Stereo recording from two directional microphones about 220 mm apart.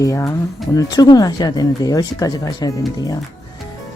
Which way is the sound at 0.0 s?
15° left (ahead or behind).